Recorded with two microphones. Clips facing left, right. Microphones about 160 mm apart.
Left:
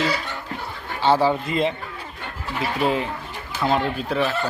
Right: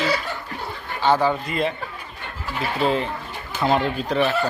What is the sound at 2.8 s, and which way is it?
A man's voice, 10° left (ahead or behind).